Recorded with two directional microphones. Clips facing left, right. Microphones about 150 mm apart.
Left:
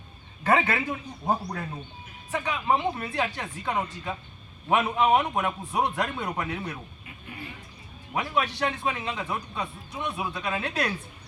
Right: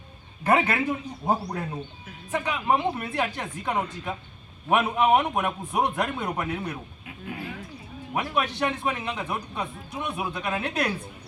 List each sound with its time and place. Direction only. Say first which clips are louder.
0.4 s a man's voice: right 2 dB; 5° right (ahead or behind)
7.3 s speech: right 6 dB; 90° right
8.1 s a man's voice: right 1 dB; 15° right (ahead or behind)